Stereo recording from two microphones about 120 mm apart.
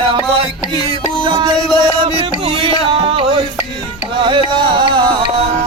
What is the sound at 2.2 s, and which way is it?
Music, 50° right (ahead or behind).